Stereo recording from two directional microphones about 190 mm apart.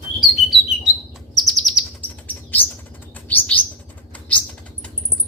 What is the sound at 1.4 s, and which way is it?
Chirp, centre (ahead or behind).